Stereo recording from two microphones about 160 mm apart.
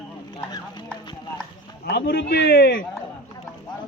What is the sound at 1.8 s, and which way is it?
Speech, 85° left.